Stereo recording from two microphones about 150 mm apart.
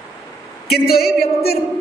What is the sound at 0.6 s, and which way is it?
Speech, 90° left.